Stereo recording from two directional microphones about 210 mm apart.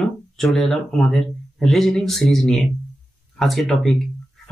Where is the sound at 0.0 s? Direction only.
Centre (ahead or behind).